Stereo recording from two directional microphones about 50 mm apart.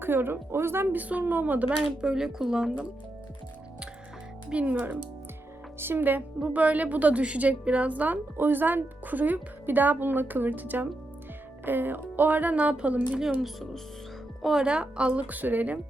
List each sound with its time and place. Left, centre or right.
0.0 s a woman's voice: right
0.9 s speech: right
2.0 s speech: centre
4.6 s a woman's voice: right
13.1 s speech: centre
14.6 s a woman's voice: centre